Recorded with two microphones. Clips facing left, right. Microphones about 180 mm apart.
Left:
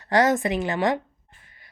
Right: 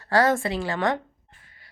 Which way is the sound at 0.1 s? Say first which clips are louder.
Left 1 dB; 20° left (ahead or behind).